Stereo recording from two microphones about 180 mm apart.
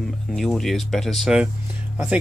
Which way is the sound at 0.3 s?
Centre (ahead or behind).